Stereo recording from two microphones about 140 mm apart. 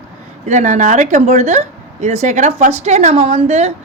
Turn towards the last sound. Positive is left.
turn(degrees=-50)  # may be behind; listen again after turning